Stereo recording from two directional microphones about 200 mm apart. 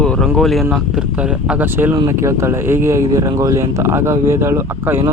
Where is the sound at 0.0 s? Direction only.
5° left (ahead or behind).